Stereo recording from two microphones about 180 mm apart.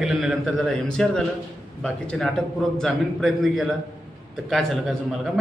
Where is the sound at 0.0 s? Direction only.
Centre (ahead or behind).